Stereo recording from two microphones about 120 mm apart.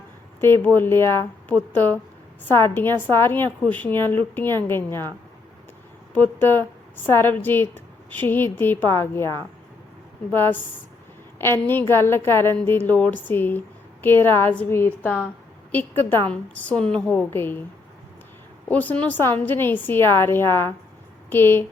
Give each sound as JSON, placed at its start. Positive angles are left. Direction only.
{"t": 0.3, "sound": "a woman's voice", "side_deg": 20}
{"t": 6.1, "sound": "a woman's voice", "side_deg": 15}
{"t": 18.7, "sound": "a woman's voice", "side_deg": 15}